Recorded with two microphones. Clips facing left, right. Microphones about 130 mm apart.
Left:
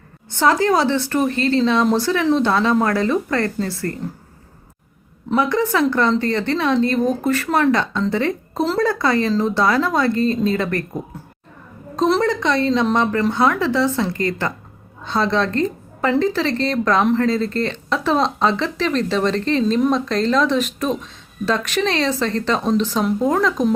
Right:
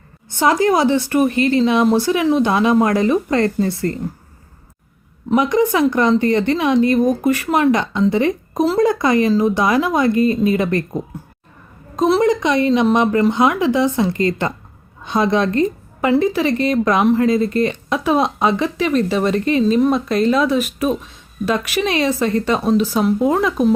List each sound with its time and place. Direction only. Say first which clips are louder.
0.3 s a woman's voice: right 1 dB; 15° right (ahead or behind)
5.3 s a woman's voice: right 3 dB; 15° right (ahead or behind)
11.9 s a woman's voice: right 3 dB; 10° right (ahead or behind)